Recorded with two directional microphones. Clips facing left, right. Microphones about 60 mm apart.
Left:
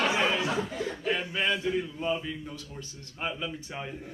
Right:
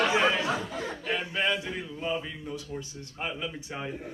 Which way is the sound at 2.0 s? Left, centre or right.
Centre.